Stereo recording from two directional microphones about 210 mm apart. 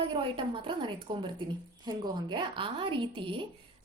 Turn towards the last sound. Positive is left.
turn(degrees=-25)  # may be behind; listen again after turning